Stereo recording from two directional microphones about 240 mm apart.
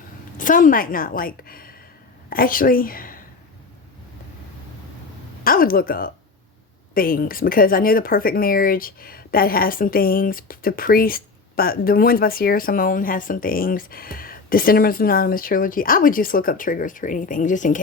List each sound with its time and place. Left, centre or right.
0.3 s a woman's voice: left
5.4 s speech: left